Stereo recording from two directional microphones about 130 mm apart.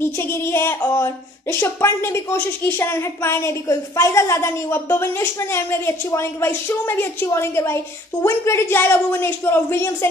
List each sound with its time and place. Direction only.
0.3 s speech: 20° left (ahead or behind)